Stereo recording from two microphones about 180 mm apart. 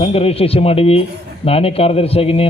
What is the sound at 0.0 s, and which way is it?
A man's voice, 35° left (ahead or behind).